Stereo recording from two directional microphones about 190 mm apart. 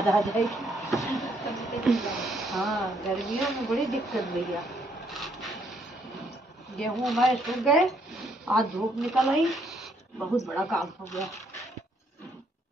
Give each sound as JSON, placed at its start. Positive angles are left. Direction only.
{"t": 0.0, "sound": "speech", "side_deg": 0}
{"t": 0.8, "sound": "a sound", "side_deg": 15}
{"t": 1.1, "sound": "vehicle", "side_deg": 0}
{"t": 1.9, "sound": "speech", "side_deg": 0}
{"t": 6.8, "sound": "speech", "side_deg": 0}